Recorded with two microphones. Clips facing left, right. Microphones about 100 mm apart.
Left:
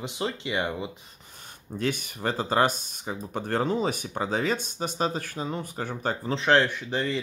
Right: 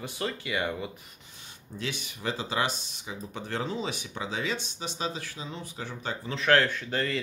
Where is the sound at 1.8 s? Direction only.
50° left (ahead or behind).